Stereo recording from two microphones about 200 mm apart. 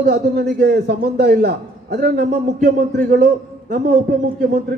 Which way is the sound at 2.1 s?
35° right (ahead or behind).